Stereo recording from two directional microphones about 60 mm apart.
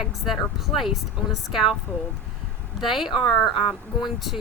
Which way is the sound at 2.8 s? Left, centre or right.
Centre.